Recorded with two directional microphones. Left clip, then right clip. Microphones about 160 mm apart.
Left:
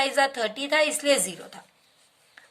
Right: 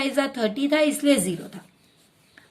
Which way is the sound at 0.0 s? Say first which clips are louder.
Left 1 dB; 20° left (ahead or behind).